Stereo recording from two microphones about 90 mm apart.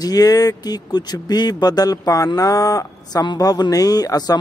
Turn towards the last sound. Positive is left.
turn(degrees=45)  # may be behind; listen again after turning